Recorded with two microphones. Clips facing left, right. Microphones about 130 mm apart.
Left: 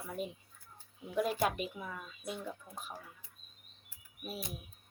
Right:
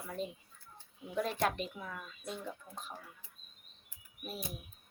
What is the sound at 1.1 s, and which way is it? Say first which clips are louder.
Speech: left 1 dB; 5° left (ahead or behind).